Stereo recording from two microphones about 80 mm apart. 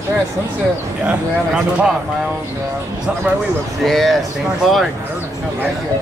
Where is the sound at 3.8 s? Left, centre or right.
Centre.